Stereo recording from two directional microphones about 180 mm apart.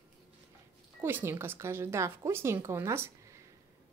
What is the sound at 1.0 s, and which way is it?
A woman's voice, 10° right (ahead or behind).